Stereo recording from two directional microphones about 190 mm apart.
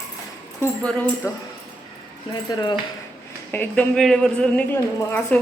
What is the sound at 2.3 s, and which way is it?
Speech, 20° left (ahead or behind).